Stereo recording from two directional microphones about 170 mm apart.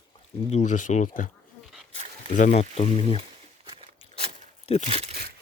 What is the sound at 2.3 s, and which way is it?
Speech, 45° left (ahead or behind).